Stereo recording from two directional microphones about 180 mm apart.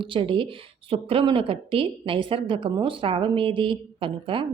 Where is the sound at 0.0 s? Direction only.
30° right (ahead or behind).